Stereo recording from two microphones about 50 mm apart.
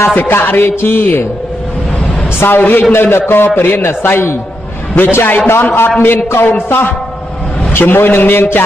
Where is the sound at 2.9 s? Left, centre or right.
Left.